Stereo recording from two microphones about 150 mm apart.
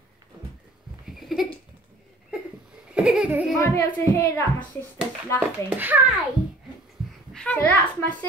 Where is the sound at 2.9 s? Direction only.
5° right (ahead or behind).